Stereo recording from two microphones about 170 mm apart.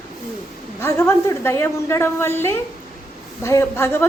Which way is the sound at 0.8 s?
15° left (ahead or behind).